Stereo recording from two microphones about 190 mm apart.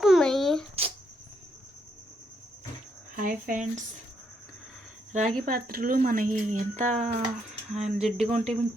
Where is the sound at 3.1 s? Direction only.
45° right (ahead or behind).